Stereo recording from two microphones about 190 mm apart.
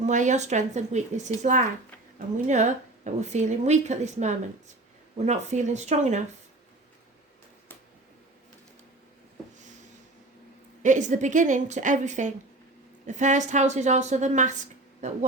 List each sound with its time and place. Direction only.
0.0 s a woman's voice: 40° right (ahead or behind)
10.8 s a woman's voice: 40° right (ahead or behind)